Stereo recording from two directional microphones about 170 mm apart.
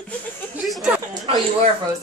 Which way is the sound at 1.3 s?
35° right (ahead or behind).